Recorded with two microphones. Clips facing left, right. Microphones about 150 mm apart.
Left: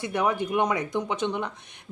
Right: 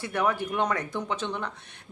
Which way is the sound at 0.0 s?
15° left (ahead or behind).